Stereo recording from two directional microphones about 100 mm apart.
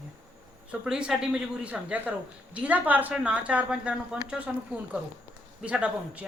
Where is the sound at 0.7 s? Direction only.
10° right (ahead or behind).